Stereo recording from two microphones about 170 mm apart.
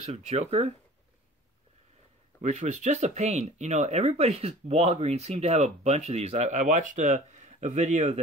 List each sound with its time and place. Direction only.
0.0 s speech: 40° right (ahead or behind)
2.4 s speech: 45° right (ahead or behind)